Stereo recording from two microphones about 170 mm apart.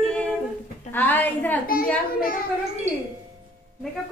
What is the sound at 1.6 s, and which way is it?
Speech, 60° left (ahead or behind).